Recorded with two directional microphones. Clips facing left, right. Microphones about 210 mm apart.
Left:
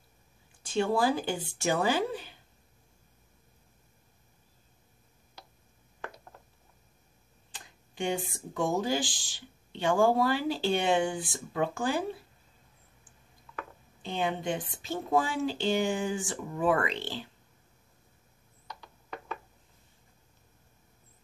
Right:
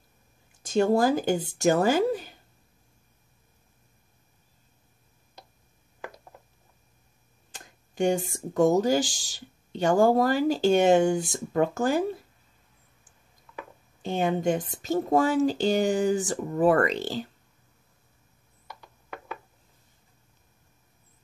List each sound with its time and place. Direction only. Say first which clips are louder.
0.6 s speech: right 5 dB; 45° right (ahead or behind)
7.5 s speech: right 8 dB; 45° right (ahead or behind)
14.0 s speech: right 6 dB; 45° right (ahead or behind)
18.8 s a sound: right 1 dB; 10° right (ahead or behind)